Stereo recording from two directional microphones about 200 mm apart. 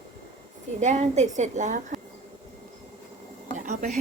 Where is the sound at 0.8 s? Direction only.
35° right (ahead or behind).